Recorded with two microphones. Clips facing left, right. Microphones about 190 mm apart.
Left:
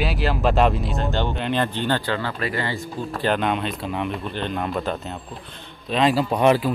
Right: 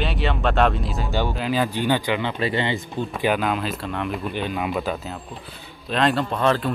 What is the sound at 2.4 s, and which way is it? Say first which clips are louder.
Speech: right 3 dB; 25° right (ahead or behind).